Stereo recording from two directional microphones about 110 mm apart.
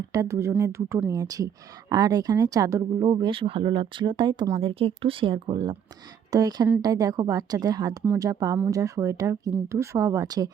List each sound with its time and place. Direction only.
0.1 s speech: 30° right (ahead or behind)
3.3 s speech: 55° right (ahead or behind)
4.6 s speech: 60° right (ahead or behind); by 10.5 s 35° right (ahead or behind)